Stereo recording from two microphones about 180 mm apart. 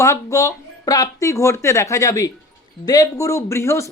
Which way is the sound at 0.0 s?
15° left (ahead or behind).